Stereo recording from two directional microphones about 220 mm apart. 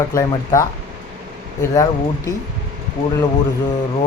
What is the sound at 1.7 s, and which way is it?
Speech, 15° left (ahead or behind).